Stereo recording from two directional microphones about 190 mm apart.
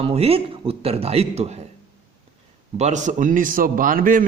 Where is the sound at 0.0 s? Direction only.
30° right (ahead or behind).